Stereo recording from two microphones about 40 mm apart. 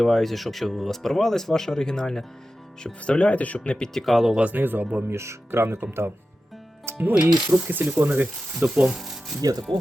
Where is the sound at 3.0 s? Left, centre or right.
Left.